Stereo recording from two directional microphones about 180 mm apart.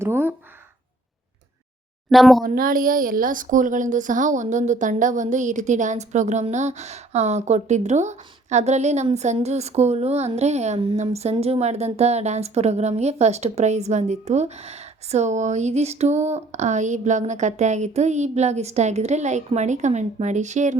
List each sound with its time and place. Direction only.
0.0 s a woman's voice: 10° right (ahead or behind)
2.0 s speech: centre (ahead or behind)
2.4 s speech: 50° right (ahead or behind)